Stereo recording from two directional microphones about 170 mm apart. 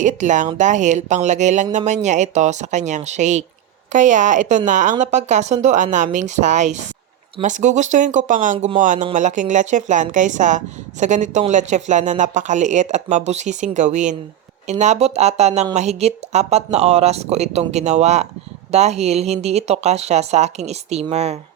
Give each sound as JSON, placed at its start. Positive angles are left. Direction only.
{"t": 0.0, "sound": "speech", "side_deg": -45}